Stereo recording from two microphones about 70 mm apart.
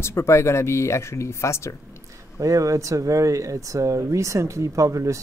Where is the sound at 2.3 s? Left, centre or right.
Right.